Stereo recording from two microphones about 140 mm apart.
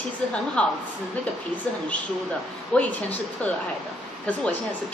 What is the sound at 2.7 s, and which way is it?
Speech, 10° left (ahead or behind).